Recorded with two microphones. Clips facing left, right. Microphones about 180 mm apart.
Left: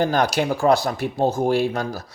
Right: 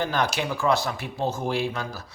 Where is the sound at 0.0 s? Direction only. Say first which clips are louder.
Left 6 dB; 40° left (ahead or behind).